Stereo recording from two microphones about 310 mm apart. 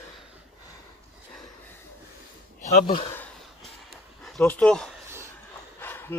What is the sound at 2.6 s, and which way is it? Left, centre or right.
Speech, left.